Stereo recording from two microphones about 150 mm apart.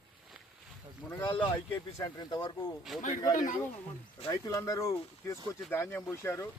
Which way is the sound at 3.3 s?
60° left (ahead or behind).